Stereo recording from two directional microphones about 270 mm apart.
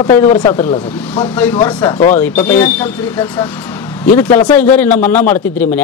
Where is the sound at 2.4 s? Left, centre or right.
Centre.